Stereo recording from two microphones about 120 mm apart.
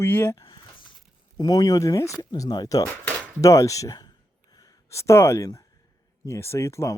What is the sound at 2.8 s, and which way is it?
Speech, 20° left (ahead or behind).